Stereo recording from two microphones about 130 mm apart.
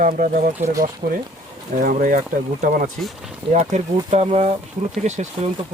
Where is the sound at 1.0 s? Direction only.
90° right.